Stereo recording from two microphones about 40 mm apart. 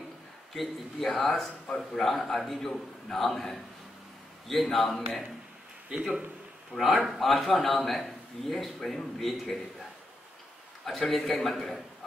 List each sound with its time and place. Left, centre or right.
0.6 s a man's voice: centre
5.9 s a man's voice: right
7.1 s a man's voice: centre
10.9 s a man's voice: centre